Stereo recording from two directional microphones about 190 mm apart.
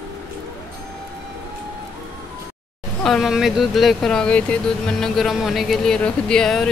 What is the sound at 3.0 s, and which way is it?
Speech, centre (ahead or behind).